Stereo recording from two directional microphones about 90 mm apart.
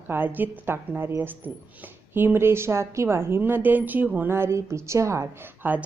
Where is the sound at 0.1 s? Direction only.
20° right (ahead or behind).